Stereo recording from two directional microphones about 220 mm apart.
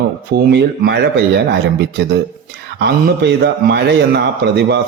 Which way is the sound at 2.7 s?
50° right (ahead or behind).